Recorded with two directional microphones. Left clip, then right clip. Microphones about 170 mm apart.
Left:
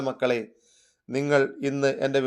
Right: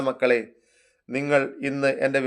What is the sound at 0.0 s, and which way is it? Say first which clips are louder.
A man's voice: right 4 dB; 30° left (ahead or behind).